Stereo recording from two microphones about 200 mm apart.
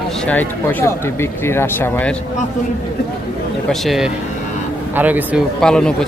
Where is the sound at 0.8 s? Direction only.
10° left (ahead or behind).